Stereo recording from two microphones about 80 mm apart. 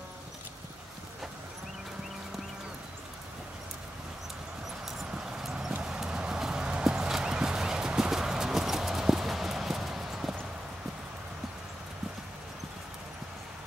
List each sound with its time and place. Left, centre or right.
4.8 s clip-clop: centre